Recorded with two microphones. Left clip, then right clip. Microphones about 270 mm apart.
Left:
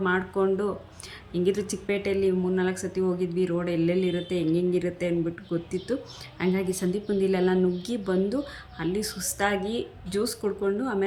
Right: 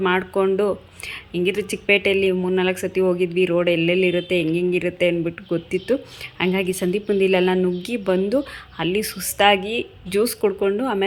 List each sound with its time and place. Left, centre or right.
0.0 s speech: centre